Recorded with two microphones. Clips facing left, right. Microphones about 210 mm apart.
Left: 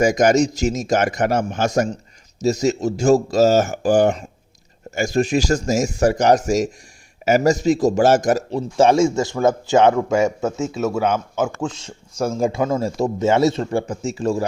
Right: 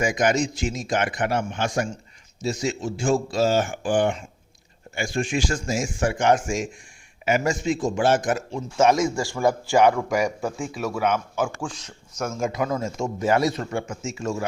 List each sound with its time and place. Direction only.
0.0 s a man's voice: 40° left (ahead or behind)